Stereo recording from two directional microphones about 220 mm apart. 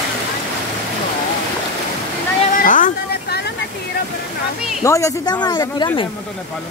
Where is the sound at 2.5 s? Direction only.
35° left (ahead or behind).